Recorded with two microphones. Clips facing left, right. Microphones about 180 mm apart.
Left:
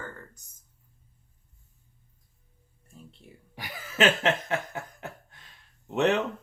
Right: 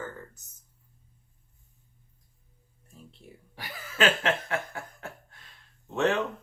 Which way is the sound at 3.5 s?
20° left (ahead or behind).